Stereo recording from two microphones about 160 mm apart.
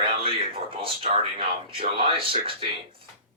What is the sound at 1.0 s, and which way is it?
Speech, 35° right (ahead or behind).